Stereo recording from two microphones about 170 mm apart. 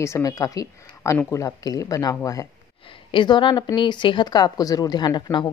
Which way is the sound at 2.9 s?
30° left (ahead or behind).